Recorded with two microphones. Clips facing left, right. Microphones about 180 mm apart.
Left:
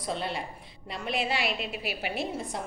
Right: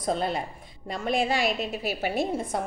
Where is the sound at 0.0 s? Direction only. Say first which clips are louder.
Right 5 dB; 45° right (ahead or behind).